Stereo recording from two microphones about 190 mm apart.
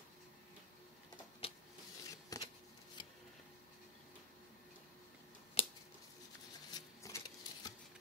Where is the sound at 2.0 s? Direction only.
20° left (ahead or behind).